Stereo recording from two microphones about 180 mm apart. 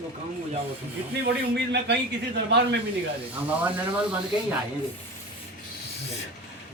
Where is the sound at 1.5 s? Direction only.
65° right (ahead or behind).